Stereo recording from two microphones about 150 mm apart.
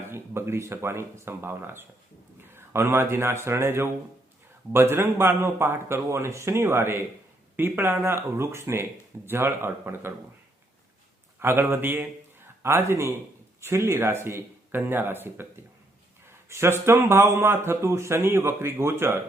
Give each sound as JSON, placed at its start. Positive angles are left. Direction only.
{"t": 0.1, "sound": "speech", "side_deg": -15}
{"t": 11.3, "sound": "a man's voice", "side_deg": -15}